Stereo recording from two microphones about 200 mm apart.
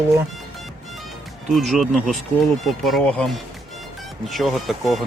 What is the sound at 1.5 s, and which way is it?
Speech, centre (ahead or behind).